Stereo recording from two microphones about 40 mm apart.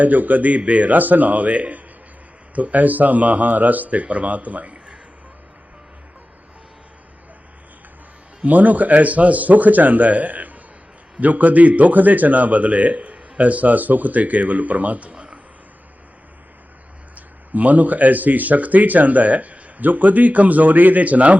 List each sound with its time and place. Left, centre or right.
0.0 s a man's voice: right
8.4 s a man's voice: right
15.1 s a sound: right
17.2 s speech: right